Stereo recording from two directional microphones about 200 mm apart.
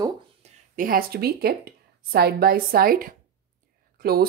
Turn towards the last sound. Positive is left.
turn(degrees=-50)  # may be behind; listen again after turning